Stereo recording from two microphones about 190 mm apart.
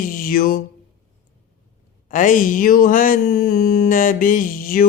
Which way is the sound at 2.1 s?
45° left (ahead or behind).